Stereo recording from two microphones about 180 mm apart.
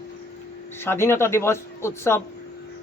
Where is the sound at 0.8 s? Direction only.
15° left (ahead or behind).